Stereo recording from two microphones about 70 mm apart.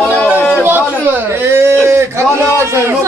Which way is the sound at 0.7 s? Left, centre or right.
Right.